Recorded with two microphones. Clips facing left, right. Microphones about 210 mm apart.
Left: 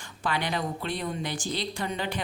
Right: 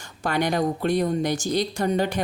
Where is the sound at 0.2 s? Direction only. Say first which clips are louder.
Right 7 dB; 45° right (ahead or behind).